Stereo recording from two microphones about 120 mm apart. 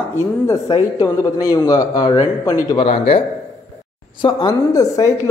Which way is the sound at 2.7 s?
55° left (ahead or behind).